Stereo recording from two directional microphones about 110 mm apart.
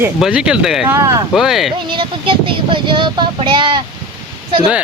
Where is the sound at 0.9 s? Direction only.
25° right (ahead or behind).